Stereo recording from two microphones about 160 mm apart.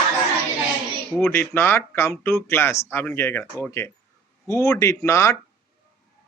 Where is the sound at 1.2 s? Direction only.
15° left (ahead or behind).